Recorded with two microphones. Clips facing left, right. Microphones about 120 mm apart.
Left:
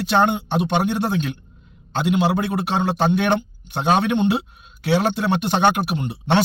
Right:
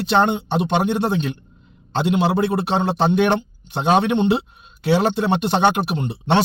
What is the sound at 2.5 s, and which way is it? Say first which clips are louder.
A man's voice: right 2 dB; 25° right (ahead or behind).